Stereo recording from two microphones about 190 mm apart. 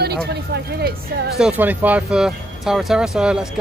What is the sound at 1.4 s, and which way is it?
Speech, 5° right (ahead or behind).